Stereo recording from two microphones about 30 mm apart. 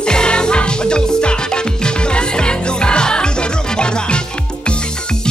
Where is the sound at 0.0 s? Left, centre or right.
Left.